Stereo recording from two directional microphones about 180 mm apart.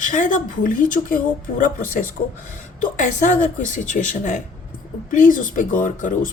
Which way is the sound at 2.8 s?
45° left (ahead or behind).